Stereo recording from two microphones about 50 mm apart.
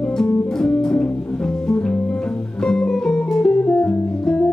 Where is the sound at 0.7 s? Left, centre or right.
Left.